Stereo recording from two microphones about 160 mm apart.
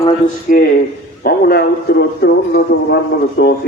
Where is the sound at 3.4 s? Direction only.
90° left.